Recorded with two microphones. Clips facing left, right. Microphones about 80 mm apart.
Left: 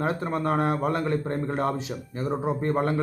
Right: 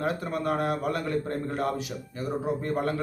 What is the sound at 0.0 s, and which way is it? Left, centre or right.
A man's voice, left.